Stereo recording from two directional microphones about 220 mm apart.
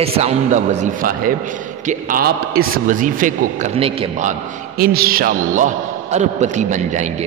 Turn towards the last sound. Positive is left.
turn(degrees=-35)  # may be behind; listen again after turning